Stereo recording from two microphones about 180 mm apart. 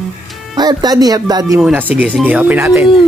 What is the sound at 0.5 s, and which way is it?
Speech, 20° right (ahead or behind).